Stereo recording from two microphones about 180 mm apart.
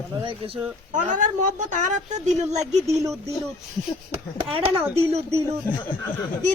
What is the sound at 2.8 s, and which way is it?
Speech, 15° right (ahead or behind).